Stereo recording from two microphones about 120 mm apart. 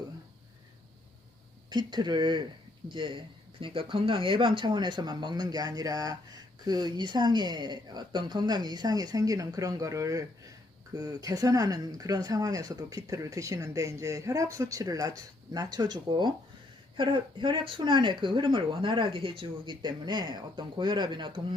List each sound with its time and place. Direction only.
1.7 s speech: 40° right (ahead or behind)